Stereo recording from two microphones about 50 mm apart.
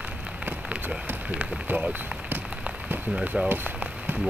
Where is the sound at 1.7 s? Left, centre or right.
Right.